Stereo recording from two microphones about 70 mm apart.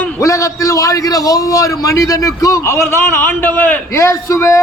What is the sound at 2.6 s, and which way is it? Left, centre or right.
A man's voice, left.